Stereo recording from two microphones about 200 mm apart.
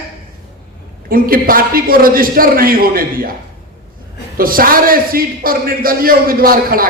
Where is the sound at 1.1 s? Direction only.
45° right (ahead or behind).